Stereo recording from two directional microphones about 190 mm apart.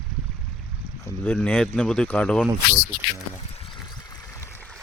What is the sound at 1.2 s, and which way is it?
Speech, 5° left (ahead or behind).